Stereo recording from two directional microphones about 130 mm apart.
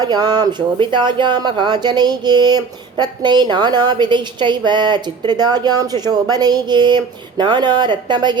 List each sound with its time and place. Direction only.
0.0 s speech: 30° right (ahead or behind)